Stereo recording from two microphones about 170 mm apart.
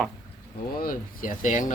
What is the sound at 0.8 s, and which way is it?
Speech, 55° left (ahead or behind).